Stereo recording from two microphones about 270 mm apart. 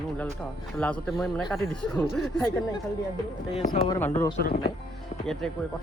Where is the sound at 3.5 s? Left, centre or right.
Left.